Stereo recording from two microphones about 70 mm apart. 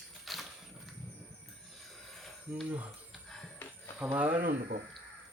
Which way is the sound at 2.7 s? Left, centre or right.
Centre.